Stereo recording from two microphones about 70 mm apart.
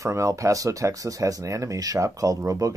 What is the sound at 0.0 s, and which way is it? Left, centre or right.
Speech, right.